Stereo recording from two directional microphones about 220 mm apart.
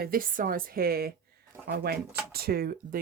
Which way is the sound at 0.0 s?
40° right (ahead or behind).